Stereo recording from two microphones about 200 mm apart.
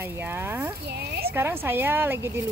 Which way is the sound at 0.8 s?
55° right (ahead or behind).